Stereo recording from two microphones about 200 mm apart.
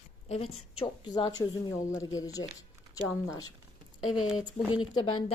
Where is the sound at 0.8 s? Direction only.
25° left (ahead or behind).